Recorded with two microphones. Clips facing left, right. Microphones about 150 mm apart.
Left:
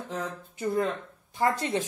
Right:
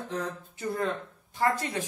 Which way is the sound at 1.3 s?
20° left (ahead or behind).